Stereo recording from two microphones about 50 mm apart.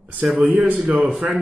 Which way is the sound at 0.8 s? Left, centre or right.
Centre.